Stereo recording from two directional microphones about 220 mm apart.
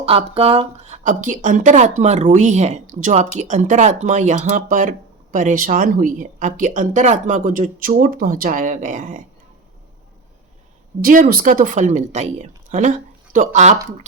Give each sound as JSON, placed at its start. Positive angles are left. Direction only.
{"t": 0.0, "sound": "speech", "side_deg": -25}
{"t": 11.0, "sound": "speech", "side_deg": -40}